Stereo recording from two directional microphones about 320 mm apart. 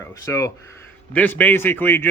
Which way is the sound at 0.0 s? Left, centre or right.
Centre.